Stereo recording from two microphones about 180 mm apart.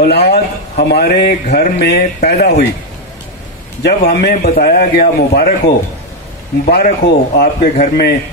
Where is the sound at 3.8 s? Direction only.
65° left (ahead or behind).